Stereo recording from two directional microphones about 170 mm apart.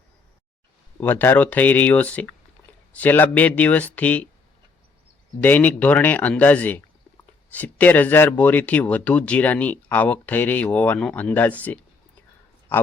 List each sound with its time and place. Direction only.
0.9 s speech: 10° left (ahead or behind)
5.4 s speech: 10° left (ahead or behind)